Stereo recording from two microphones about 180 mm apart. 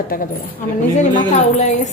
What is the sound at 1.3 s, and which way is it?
Speech, 40° left (ahead or behind).